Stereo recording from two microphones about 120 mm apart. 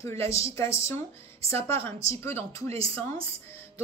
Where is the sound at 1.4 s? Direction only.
55° right (ahead or behind).